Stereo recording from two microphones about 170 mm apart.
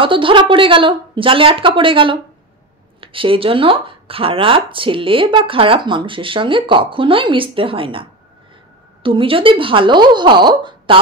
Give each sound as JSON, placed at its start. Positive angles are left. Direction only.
{"t": 0.0, "sound": "speech", "side_deg": -30}